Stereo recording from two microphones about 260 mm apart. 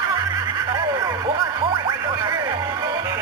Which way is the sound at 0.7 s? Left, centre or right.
Centre.